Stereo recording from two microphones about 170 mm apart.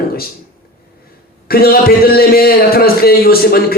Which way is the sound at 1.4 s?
60° left (ahead or behind).